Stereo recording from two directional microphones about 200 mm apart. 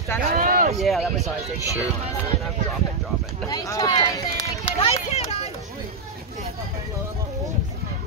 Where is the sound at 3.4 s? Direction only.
15° left (ahead or behind).